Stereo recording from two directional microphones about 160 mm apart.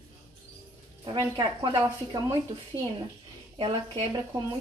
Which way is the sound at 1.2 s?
20° right (ahead or behind).